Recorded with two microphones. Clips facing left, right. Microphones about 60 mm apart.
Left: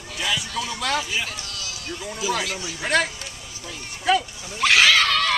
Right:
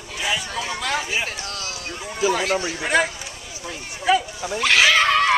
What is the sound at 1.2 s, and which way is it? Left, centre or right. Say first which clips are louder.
A man's voice: right 4 dB; right.